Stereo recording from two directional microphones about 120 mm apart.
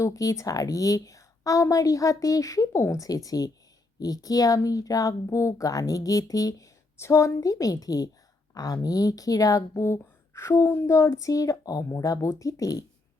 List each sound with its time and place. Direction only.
0.0 s speech: 25° left (ahead or behind)